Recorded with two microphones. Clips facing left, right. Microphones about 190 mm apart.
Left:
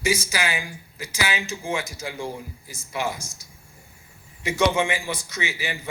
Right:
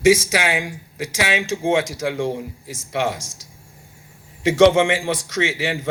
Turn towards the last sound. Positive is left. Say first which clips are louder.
# right 8 dB
turn(degrees=-90)